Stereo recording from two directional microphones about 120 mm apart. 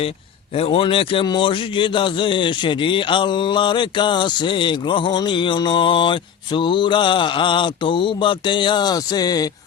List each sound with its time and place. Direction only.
0.5 s a man's voice: 50° left (ahead or behind); by 9.5 s 35° left (ahead or behind)